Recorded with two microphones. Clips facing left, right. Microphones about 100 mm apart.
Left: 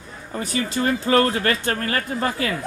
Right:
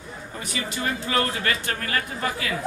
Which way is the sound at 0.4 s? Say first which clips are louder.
Left 7 dB; 35° left (ahead or behind).